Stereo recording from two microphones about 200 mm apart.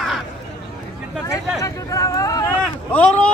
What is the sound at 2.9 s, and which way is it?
Vehicle, 5° left (ahead or behind).